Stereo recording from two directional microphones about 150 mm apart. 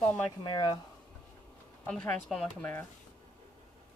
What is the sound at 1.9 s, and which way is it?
Speech, 5° left (ahead or behind).